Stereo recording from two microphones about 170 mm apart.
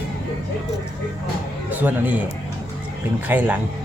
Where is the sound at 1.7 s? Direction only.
10° right (ahead or behind).